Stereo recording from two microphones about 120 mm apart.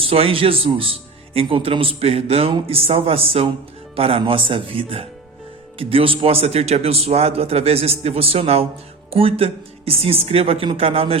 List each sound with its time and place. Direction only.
0.0 s speech: 50° right (ahead or behind)